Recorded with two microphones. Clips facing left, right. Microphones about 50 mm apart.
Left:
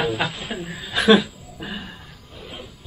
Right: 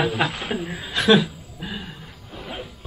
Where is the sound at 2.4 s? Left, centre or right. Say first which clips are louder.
Right 4 dB; right.